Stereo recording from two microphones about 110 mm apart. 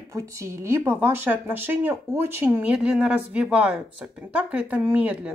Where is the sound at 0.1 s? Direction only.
25° right (ahead or behind).